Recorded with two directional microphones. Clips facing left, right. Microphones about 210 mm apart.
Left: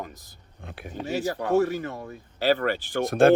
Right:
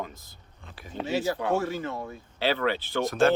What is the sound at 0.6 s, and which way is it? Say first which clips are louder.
Speech: left 7 dB; 60° left (ahead or behind).